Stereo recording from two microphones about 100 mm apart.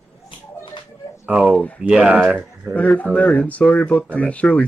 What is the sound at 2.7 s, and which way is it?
Speech, 15° left (ahead or behind).